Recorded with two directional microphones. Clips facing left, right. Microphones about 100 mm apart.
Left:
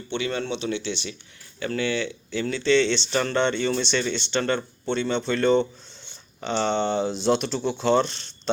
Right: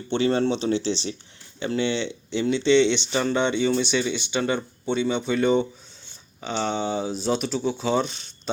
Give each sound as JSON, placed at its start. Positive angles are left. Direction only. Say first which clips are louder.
{"t": 0.1, "sound": "speech", "louder": "right 6 dB", "side_deg": -35}